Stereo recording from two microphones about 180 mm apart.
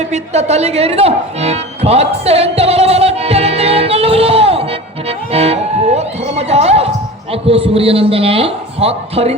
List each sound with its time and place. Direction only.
0.0 s music: 40° right (ahead or behind)
7.4 s a man's voice: 35° right (ahead or behind)